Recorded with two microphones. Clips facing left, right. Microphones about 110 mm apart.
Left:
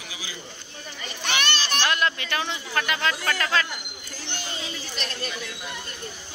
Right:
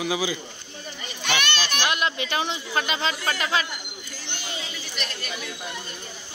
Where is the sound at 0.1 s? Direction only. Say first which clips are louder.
Right 12 dB; 90° right.